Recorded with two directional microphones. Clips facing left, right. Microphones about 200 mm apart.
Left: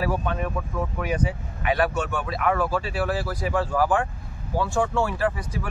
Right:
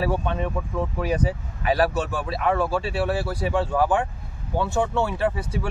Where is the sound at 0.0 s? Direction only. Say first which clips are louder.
Right 1 dB; 25° right (ahead or behind).